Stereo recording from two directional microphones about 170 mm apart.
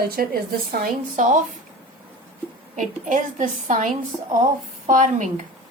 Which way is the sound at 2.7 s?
50° right (ahead or behind).